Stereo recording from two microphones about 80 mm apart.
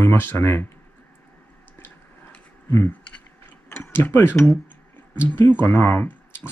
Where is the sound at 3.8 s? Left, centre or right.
Left.